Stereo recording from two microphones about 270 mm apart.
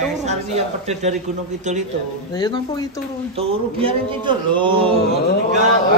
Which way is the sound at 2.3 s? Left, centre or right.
Centre.